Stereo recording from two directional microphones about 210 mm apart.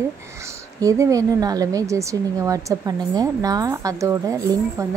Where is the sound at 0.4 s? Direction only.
15° right (ahead or behind).